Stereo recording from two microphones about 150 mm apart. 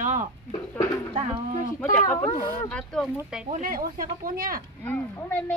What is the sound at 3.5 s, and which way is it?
Speech, 65° right (ahead or behind).